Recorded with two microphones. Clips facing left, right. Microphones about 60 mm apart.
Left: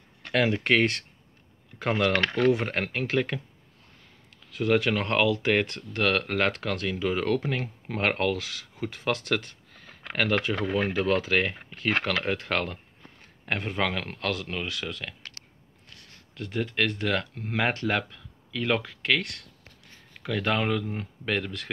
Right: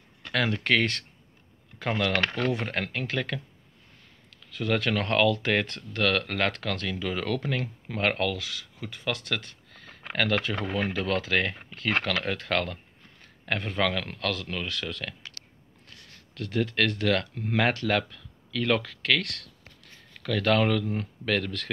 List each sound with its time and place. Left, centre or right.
0.3 s speech: left
2.4 s speech: left
2.7 s speech: left
4.7 s speech: centre
16.3 s speech: centre
17.8 s speech: centre